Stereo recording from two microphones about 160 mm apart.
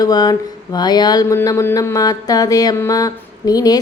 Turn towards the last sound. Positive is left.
turn(degrees=25)  # may be behind; listen again after turning